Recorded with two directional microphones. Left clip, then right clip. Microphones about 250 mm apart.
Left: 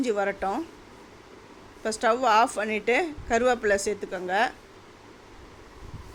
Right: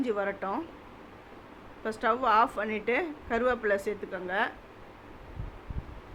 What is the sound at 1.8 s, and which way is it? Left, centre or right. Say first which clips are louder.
A woman's voice: left 4 dB; left.